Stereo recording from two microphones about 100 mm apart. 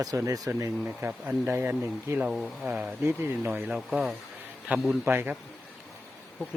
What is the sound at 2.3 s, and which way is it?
Speech, 5° right (ahead or behind).